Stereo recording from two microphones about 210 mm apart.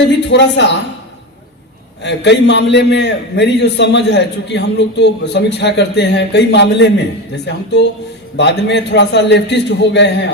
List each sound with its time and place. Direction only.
0.3 s a man's voice: 55° left (ahead or behind)
2.0 s a man's voice: 55° left (ahead or behind)